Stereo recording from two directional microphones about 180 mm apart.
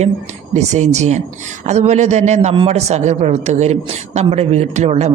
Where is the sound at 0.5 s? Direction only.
40° right (ahead or behind).